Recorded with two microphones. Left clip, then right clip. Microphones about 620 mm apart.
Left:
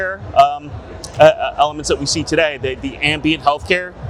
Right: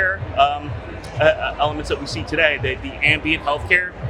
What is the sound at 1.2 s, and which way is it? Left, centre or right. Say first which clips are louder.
Speech: left 6 dB; left.